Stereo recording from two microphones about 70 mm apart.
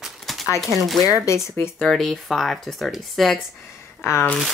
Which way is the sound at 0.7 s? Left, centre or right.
Centre.